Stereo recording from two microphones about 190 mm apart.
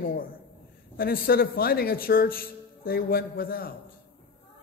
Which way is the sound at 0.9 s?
50° left (ahead or behind).